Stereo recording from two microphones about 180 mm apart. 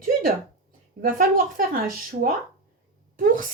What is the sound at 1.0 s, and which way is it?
Speech, 50° right (ahead or behind).